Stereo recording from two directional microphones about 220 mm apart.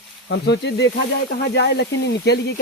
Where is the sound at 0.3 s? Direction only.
50° left (ahead or behind).